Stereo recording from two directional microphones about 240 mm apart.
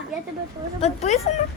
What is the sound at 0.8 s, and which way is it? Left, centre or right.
Speech, left.